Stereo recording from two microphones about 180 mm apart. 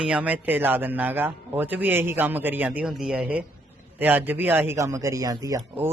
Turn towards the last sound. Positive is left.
turn(degrees=-15)  # may be behind; listen again after turning